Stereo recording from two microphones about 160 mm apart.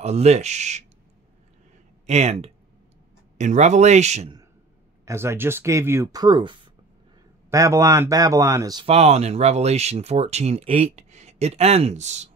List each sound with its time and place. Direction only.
0.0 s speech: 45° right (ahead or behind)
2.0 s speech: 40° right (ahead or behind)
5.0 s speech: 15° right (ahead or behind)
7.4 s speech: 20° right (ahead or behind)
8.8 s speech: 40° right (ahead or behind)